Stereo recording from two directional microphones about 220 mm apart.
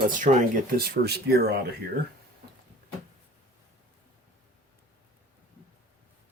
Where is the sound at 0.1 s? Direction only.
35° right (ahead or behind).